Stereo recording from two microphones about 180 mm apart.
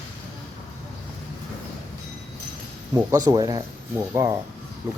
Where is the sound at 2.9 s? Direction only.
20° right (ahead or behind).